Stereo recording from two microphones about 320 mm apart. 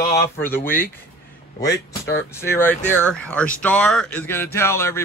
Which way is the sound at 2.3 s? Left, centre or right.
Centre.